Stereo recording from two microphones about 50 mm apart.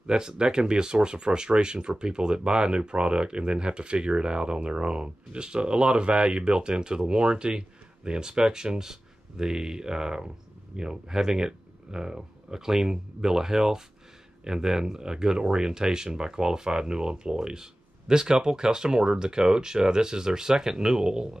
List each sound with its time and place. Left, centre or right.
0.0 s speech: centre